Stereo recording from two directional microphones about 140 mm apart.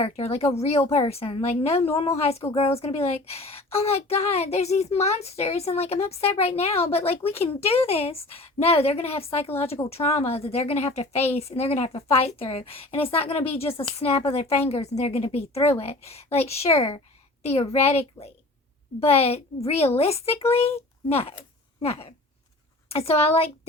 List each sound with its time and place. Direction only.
0.0 s a woman's voice: 50° left (ahead or behind)